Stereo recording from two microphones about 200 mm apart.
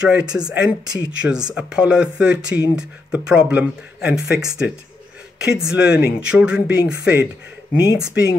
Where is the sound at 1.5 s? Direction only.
5° right (ahead or behind).